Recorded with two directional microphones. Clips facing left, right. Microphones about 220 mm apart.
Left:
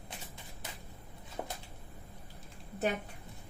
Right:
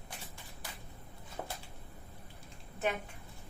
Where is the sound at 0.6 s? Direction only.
20° left (ahead or behind).